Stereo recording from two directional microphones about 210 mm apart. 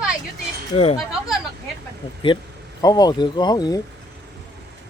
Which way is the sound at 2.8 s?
20° left (ahead or behind).